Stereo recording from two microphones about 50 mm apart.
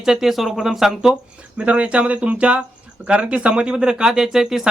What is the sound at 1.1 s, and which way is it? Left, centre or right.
Speech, right.